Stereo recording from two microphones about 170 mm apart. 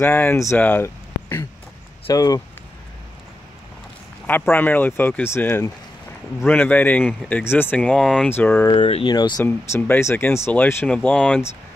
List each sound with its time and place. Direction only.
0.0 s speech: 15° left (ahead or behind)
4.3 s speech: 10° left (ahead or behind)
8.6 s speech: 30° left (ahead or behind)
9.4 s speech: 15° left (ahead or behind)